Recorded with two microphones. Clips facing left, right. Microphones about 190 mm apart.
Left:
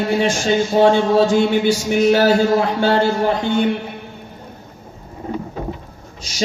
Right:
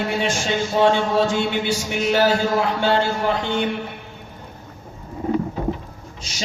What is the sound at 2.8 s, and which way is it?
Speech, 40° left (ahead or behind).